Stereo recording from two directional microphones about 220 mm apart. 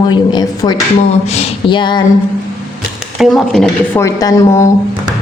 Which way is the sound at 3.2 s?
Centre (ahead or behind).